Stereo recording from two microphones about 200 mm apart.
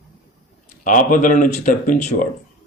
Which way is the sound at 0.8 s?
40° left (ahead or behind).